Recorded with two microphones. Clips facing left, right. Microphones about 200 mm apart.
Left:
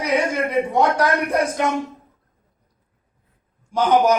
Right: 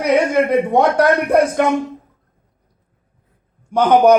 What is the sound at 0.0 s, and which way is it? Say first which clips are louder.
A man's voice: right 6 dB; 60° right (ahead or behind).